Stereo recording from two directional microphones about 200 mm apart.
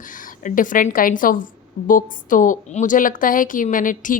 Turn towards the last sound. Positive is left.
turn(degrees=40)  # may be behind; listen again after turning